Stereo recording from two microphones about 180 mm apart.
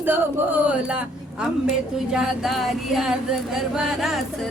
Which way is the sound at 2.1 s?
Centre (ahead or behind).